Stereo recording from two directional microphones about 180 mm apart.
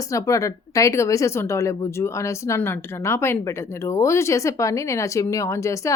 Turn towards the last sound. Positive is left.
turn(degrees=15)  # may be behind; listen again after turning